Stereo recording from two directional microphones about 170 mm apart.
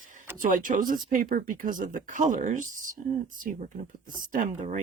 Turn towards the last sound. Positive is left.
turn(degrees=-50)  # may be behind; listen again after turning